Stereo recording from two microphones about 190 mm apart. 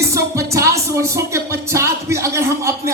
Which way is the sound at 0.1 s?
15° right (ahead or behind).